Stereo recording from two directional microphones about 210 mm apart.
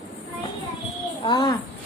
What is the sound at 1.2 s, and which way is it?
Speech, 20° left (ahead or behind).